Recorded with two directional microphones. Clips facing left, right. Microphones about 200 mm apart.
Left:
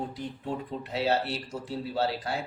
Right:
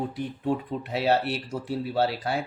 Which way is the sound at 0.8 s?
60° right (ahead or behind).